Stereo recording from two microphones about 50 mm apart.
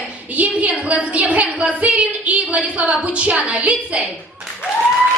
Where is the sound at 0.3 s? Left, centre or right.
Right.